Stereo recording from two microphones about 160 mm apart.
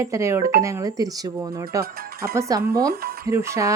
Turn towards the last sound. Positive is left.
turn(degrees=-20)  # may be behind; listen again after turning